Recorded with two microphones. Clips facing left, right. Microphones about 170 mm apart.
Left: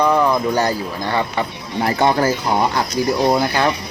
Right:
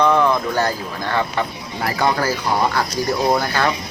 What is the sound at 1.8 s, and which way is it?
Speech, 25° left (ahead or behind).